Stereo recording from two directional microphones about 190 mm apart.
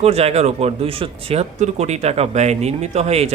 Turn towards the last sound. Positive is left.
turn(degrees=-35)  # may be behind; listen again after turning